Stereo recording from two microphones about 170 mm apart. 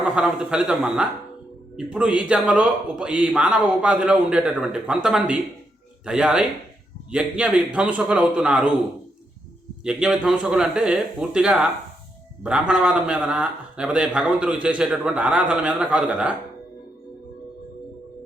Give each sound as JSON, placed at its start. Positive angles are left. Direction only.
{"t": 0.2, "sound": "a man's voice", "side_deg": -5}
{"t": 9.8, "sound": "a man's voice", "side_deg": -5}